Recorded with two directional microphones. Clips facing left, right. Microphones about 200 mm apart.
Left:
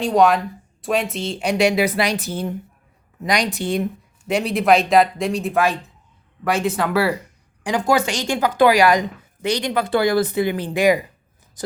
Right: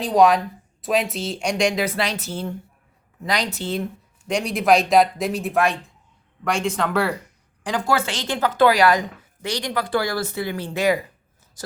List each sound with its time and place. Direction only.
0.0 s a woman's voice: centre (ahead or behind)
4.3 s a woman's voice: 5° left (ahead or behind); by 11.7 s 20° left (ahead or behind)